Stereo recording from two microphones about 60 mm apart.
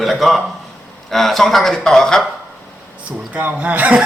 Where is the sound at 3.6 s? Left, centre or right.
Right.